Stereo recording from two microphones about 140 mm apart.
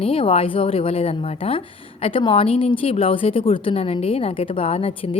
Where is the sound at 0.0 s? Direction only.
40° left (ahead or behind).